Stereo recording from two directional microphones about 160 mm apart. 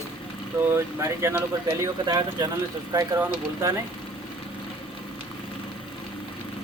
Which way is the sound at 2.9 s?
20° right (ahead or behind).